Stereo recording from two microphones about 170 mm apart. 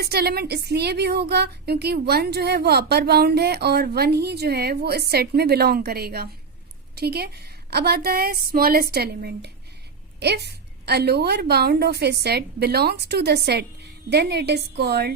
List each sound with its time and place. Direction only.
0.0 s a woman's voice: 70° right (ahead or behind)